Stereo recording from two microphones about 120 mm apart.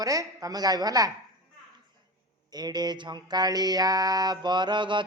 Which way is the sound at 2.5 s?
35° right (ahead or behind).